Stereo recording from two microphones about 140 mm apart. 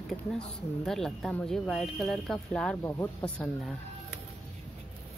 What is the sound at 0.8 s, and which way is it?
Speech, centre (ahead or behind).